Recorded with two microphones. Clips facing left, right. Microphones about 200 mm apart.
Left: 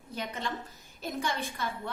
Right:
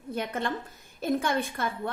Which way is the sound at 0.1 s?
55° right (ahead or behind).